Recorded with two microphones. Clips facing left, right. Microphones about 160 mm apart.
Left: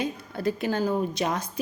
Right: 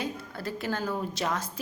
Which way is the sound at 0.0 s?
20° left (ahead or behind).